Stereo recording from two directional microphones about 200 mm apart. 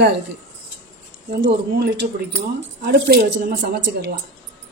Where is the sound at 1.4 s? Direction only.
60° right (ahead or behind).